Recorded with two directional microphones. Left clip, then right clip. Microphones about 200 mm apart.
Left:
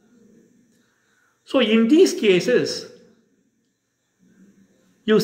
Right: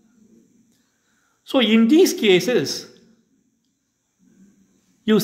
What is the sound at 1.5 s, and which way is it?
Speech, 35° right (ahead or behind).